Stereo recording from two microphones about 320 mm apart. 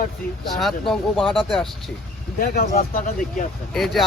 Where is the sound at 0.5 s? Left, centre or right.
Centre.